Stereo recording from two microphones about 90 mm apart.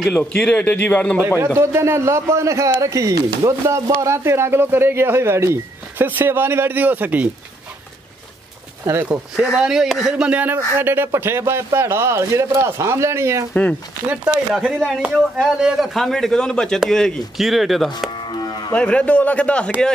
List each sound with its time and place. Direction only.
0.1 s a man's voice: 15° left (ahead or behind)
1.4 s a man's voice: 30° right (ahead or behind)
8.8 s a man's voice: 25° right (ahead or behind)
9.5 s a man's voice: 5° right (ahead or behind); by 13.5 s 30° right (ahead or behind)
13.5 s a man's voice: 15° left (ahead or behind)
14.2 s speech: 10° right (ahead or behind)
18.1 s music: 55° left (ahead or behind)
18.7 s a man's voice: 15° left (ahead or behind)